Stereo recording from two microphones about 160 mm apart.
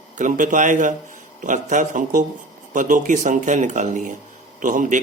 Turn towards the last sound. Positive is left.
turn(degrees=-55)  # may be behind; listen again after turning